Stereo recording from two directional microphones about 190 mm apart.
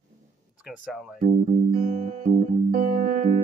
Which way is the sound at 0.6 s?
Centre (ahead or behind).